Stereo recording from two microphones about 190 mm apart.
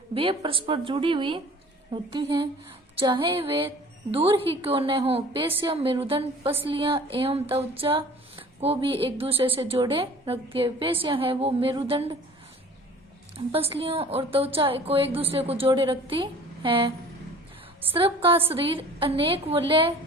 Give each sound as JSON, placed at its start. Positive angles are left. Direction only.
{"t": 0.1, "sound": "a woman's voice", "side_deg": -30}
{"t": 13.3, "sound": "a woman's voice", "side_deg": -30}
{"t": 17.9, "sound": "a woman's voice", "side_deg": -30}